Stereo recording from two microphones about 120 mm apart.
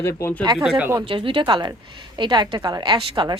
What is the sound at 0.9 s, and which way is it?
A woman's voice, 45° right (ahead or behind).